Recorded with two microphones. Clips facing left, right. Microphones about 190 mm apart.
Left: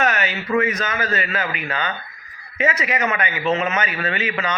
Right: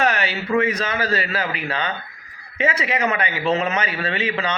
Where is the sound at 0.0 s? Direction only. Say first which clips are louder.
Even; 30° right (ahead or behind).